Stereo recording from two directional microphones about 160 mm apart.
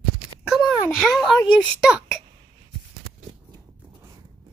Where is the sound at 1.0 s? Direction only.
Centre (ahead or behind).